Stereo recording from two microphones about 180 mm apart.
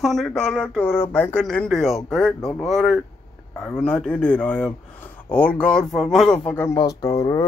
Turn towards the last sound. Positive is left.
turn(degrees=20)  # may be behind; listen again after turning